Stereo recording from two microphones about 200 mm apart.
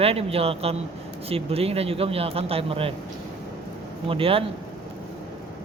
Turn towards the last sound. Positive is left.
turn(degrees=-25)  # may be behind; listen again after turning